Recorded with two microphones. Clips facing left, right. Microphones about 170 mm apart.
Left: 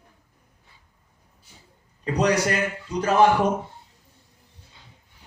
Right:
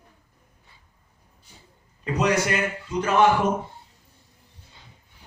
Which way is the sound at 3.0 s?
35° left (ahead or behind).